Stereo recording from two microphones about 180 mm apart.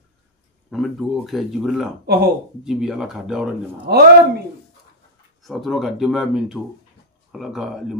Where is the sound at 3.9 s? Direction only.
60° right (ahead or behind).